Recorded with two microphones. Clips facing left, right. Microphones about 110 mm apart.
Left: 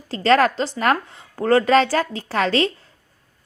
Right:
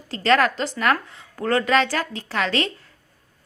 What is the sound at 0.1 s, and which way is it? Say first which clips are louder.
A woman's voice: left 3 dB; 35° left (ahead or behind).